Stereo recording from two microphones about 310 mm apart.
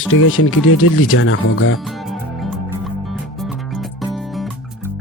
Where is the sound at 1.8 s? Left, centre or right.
Centre.